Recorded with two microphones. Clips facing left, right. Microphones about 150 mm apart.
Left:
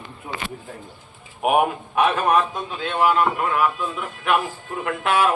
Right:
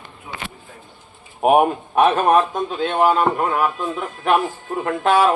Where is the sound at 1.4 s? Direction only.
35° right (ahead or behind).